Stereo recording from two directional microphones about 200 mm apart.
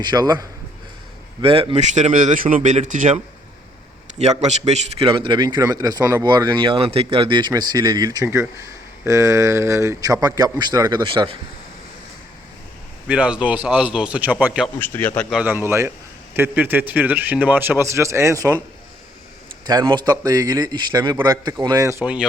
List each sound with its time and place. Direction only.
0.0 s a man's voice: 20° right (ahead or behind); by 3.2 s 40° right (ahead or behind)
4.2 s a man's voice: 35° right (ahead or behind)
13.1 s a man's voice: 5° right (ahead or behind)
14.8 s speech: 10° left (ahead or behind)
15.3 s a man's voice: 5° right (ahead or behind)
19.6 s a man's voice: 20° right (ahead or behind)